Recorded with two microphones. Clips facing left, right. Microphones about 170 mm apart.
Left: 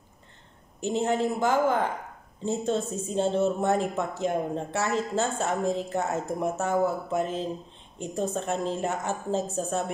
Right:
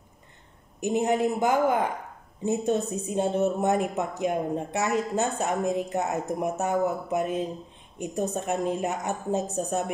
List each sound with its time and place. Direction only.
0.7 s speech: 15° right (ahead or behind)